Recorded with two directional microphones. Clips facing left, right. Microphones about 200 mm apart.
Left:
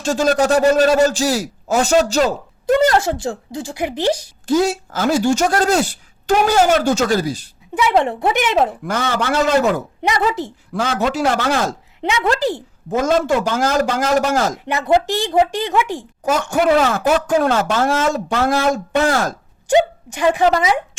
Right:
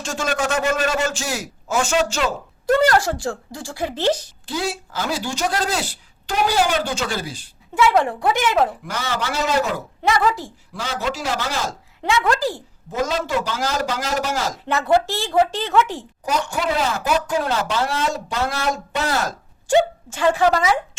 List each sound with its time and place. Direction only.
0.0 s a man's voice: 35° left (ahead or behind)
2.6 s a woman's voice: 20° left (ahead or behind)
4.4 s speech: 45° left (ahead or behind)
7.8 s a woman's voice: 25° left (ahead or behind)
8.9 s speech: 50° left (ahead or behind)
10.0 s a woman's voice: 20° left (ahead or behind)
10.8 s speech: 55° left (ahead or behind)
12.0 s a woman's voice: 25° left (ahead or behind)
12.9 s speech: 50° left (ahead or behind)
14.6 s speech: 15° left (ahead or behind)
16.2 s speech: 50° left (ahead or behind)
19.6 s speech: 15° left (ahead or behind)